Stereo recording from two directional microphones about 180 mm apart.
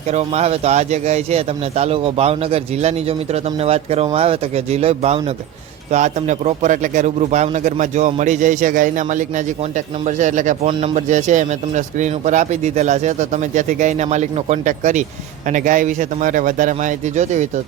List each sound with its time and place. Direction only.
0.1 s a man's voice: 35° right (ahead or behind)
10.7 s speech: 30° right (ahead or behind)
10.9 s a man's voice: 45° right (ahead or behind)